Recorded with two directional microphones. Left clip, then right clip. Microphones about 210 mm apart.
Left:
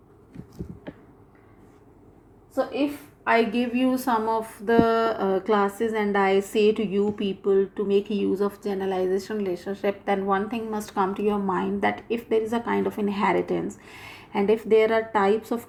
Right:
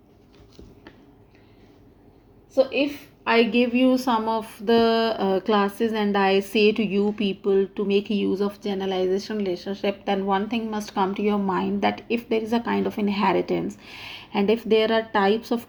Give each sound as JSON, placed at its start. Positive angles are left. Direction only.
{"t": 3.2, "sound": "a woman's voice", "side_deg": -40}